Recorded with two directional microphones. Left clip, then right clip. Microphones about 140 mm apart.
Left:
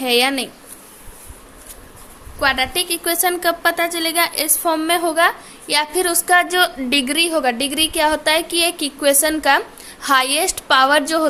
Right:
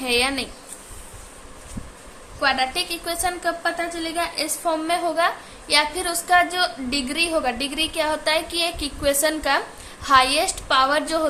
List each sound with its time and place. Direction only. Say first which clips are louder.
0.0 s a woman's voice: left 5 dB; 45° left (ahead or behind)
2.4 s a woman's voice: left 3 dB; 60° left (ahead or behind)
4.2 s a woman's voice: left 4 dB; 75° left (ahead or behind); by 11.3 s 55° left (ahead or behind)